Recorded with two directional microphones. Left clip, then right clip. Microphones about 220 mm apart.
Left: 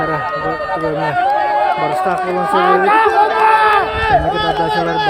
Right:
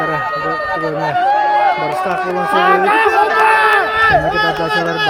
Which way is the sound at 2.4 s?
50° right (ahead or behind).